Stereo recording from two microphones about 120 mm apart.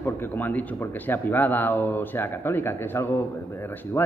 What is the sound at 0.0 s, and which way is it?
A man's voice, 15° left (ahead or behind).